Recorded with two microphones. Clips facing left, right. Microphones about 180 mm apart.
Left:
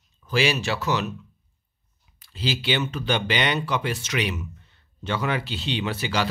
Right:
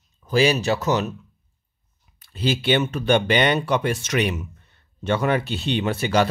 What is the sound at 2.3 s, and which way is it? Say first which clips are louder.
Speech: right 5 dB; 50° right (ahead or behind).